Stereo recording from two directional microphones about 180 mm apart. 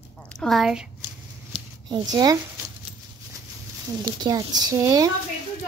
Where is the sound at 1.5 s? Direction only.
25° right (ahead or behind).